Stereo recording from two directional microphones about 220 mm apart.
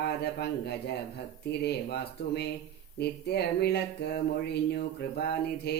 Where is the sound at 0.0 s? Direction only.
45° left (ahead or behind).